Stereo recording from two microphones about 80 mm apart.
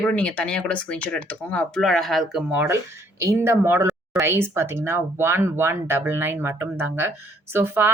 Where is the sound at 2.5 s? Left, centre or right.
Right.